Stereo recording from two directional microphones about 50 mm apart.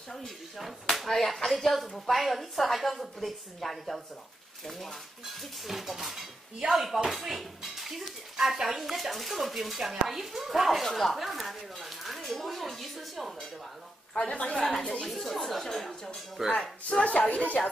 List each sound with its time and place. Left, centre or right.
0.9 s speech: centre
14.1 s speech: left
14.6 s speech: centre
16.4 s speech: centre
17.0 s speech: left